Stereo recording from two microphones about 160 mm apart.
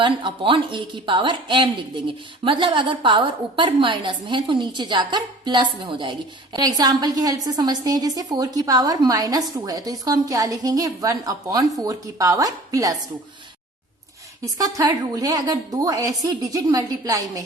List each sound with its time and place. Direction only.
0.0 s a woman's voice: 30° right (ahead or behind)
14.4 s a woman's voice: 20° right (ahead or behind)